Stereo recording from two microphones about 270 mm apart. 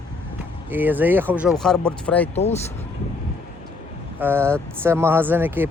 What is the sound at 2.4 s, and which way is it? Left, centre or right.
Speech, left.